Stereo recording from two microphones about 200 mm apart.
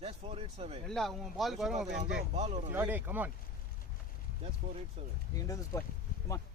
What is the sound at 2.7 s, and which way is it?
Speech, 10° right (ahead or behind).